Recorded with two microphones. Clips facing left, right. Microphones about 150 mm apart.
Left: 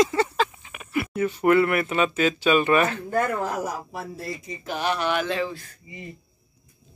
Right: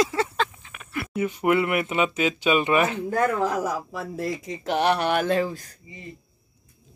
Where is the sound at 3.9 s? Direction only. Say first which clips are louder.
Right 4 dB; 90° right; by 5.7 s 45° right (ahead or behind).